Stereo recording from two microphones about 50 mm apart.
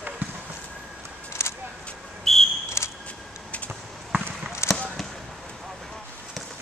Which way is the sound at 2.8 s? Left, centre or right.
Left.